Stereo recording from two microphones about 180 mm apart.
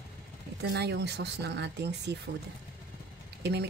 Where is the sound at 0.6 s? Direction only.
70° right (ahead or behind).